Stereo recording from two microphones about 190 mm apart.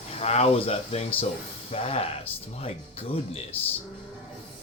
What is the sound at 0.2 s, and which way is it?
Speech, 35° left (ahead or behind).